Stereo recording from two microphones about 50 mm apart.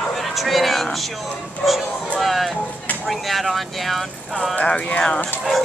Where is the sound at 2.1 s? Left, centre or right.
Centre.